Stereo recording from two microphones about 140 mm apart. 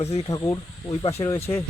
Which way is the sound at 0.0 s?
50° left (ahead or behind).